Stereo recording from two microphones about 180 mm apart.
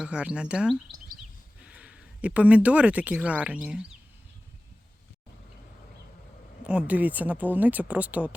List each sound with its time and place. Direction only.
0.0 s speech: 5° right (ahead or behind)
6.7 s speech: 5° right (ahead or behind)